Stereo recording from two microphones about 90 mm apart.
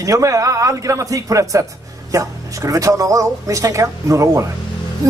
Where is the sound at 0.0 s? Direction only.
35° right (ahead or behind).